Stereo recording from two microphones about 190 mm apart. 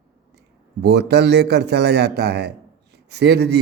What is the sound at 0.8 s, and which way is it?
A man's voice, 60° right (ahead or behind).